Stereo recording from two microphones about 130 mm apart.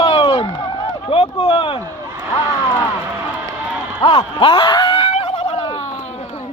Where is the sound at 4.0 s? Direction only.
40° left (ahead or behind).